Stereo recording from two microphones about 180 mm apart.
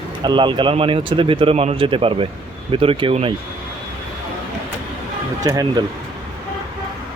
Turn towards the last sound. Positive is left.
turn(degrees=-20)  # may be behind; listen again after turning